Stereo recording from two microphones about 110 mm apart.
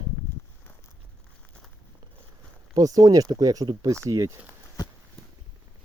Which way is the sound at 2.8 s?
35° right (ahead or behind).